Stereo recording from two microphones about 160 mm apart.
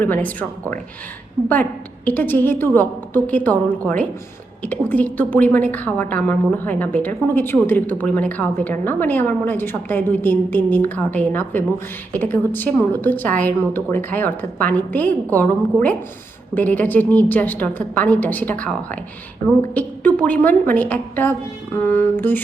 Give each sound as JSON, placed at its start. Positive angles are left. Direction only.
{"t": 0.0, "sound": "a woman's voice", "side_deg": 10}
{"t": 2.0, "sound": "a woman's voice", "side_deg": 10}
{"t": 19.7, "sound": "a woman's voice", "side_deg": 10}